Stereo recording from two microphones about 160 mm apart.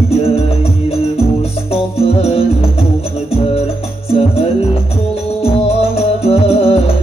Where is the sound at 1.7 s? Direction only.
40° left (ahead or behind).